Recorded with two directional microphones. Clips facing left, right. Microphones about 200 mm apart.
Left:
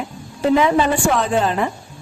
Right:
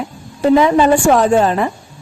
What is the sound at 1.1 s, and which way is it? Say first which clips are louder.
Speech: right 6 dB; 45° right (ahead or behind).